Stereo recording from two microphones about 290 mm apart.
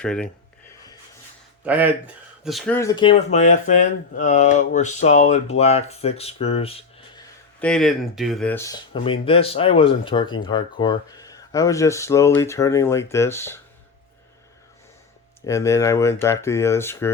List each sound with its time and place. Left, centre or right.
0.0 s speech: centre
1.6 s speech: centre
7.6 s speech: centre
15.4 s speech: centre